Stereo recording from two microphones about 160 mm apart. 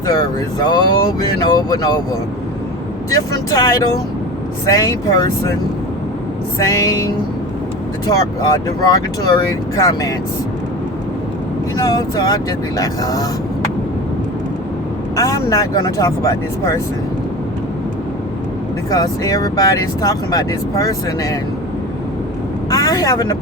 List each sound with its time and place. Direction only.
0.6 s speech: 25° left (ahead or behind)
3.1 s speech: 20° left (ahead or behind)
6.6 s speech: 20° left (ahead or behind)
8.0 s speech: 25° left (ahead or behind)
11.8 s speech: 25° left (ahead or behind)
15.1 s speech: 20° left (ahead or behind)
18.9 s speech: 20° left (ahead or behind)
22.7 s speech: 20° left (ahead or behind)